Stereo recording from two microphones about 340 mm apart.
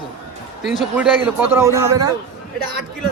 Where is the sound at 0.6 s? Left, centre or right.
Centre.